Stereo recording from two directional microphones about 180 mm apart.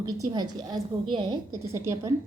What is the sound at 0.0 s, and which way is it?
A woman's voice, 20° right (ahead or behind).